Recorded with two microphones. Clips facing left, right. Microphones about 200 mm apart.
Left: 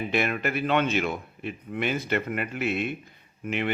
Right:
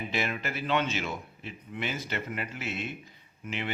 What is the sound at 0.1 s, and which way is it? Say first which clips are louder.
A man's voice: left 7 dB; 60° left (ahead or behind).